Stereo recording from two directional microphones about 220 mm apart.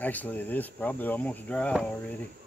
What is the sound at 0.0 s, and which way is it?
Speech, 5° left (ahead or behind).